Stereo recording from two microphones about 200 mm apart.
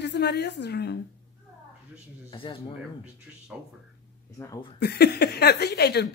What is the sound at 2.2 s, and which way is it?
Speech, 25° left (ahead or behind).